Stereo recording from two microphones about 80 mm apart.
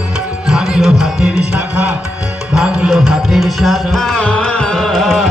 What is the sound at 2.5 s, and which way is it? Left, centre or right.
Music, centre.